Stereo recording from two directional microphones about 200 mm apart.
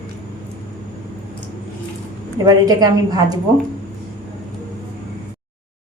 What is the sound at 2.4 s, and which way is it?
Speech, 20° right (ahead or behind).